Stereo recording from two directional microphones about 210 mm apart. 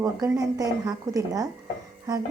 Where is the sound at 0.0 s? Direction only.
15° right (ahead or behind).